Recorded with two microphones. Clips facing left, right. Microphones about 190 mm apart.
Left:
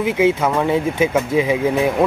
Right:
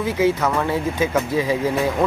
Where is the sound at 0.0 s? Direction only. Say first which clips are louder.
Left 3 dB; 15° left (ahead or behind).